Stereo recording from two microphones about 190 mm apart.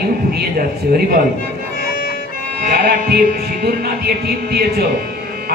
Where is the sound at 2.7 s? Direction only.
55° right (ahead or behind).